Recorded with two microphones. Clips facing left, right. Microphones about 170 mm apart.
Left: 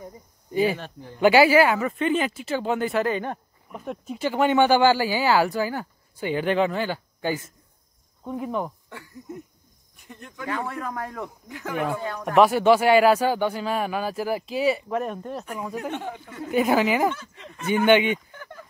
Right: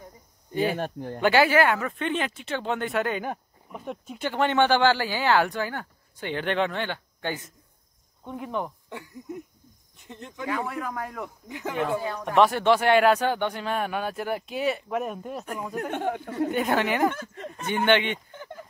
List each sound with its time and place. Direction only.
0.7 s speech: 50° right (ahead or behind)
1.2 s speech: 10° left (ahead or behind)
8.8 s speech: 15° right (ahead or behind)
10.7 s speech: centre (ahead or behind)
11.4 s speech: 20° right (ahead or behind)
12.4 s speech: 10° left (ahead or behind)
15.9 s speech: 55° right (ahead or behind)
16.4 s a woman's voice: 5° left (ahead or behind)
17.1 s speech: 50° right (ahead or behind)
17.6 s a woman's voice: 10° left (ahead or behind)
18.3 s a sound: 20° right (ahead or behind)